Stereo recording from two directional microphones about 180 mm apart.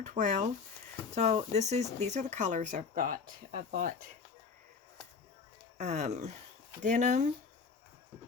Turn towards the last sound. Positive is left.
turn(degrees=-45)  # may be behind; listen again after turning